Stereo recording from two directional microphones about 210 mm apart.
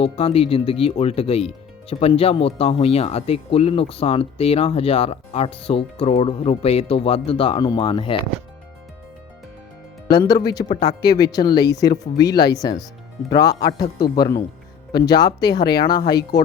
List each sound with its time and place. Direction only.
0.0 s speech: 30° left (ahead or behind)
10.1 s speech: 20° left (ahead or behind)
14.9 s speech: 20° left (ahead or behind)